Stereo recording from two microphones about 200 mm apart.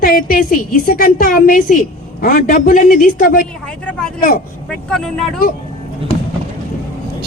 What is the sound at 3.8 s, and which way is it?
Vehicle, 5° left (ahead or behind).